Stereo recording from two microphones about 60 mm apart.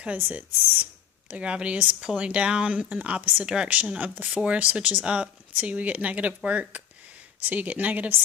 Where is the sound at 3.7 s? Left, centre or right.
Right.